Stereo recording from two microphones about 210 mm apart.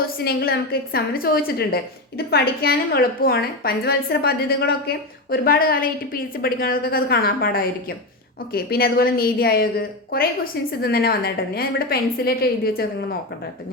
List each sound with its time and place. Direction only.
0.2 s a woman's voice: 50° left (ahead or behind)